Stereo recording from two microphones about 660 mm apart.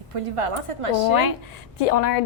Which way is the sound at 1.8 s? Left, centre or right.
Left.